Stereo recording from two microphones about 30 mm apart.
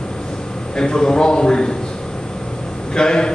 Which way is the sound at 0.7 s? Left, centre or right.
Left.